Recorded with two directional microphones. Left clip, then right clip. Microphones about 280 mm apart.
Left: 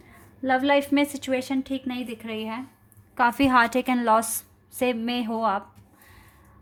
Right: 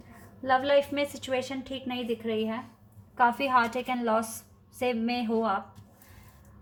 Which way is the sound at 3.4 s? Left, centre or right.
Left.